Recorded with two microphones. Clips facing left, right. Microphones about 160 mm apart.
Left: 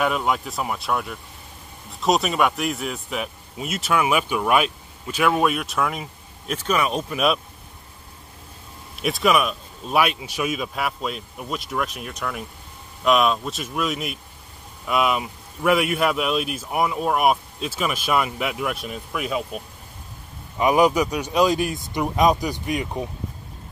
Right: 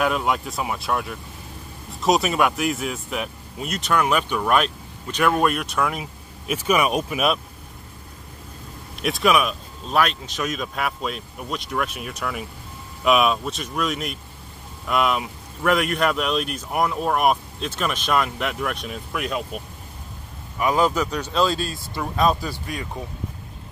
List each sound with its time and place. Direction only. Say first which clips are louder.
0.0 s speech: even; centre (ahead or behind)
9.0 s speech: even; centre (ahead or behind)
20.5 s a man's voice: left 3 dB; 20° left (ahead or behind)